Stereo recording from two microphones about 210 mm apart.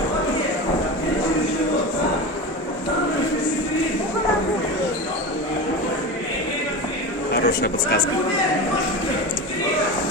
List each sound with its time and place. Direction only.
7.3 s speech: 50° left (ahead or behind)